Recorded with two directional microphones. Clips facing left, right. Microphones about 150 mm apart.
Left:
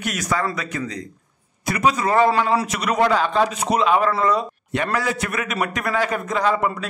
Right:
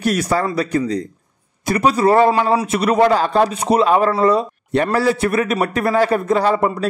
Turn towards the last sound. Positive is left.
turn(degrees=-35)  # may be behind; listen again after turning